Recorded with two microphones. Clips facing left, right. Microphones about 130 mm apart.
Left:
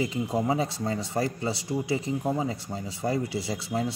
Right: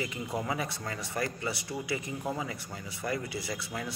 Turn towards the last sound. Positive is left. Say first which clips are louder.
# left 7 dB
turn(degrees=25)  # may be behind; listen again after turning